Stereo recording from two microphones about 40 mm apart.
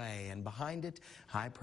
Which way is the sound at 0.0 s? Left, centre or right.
Centre.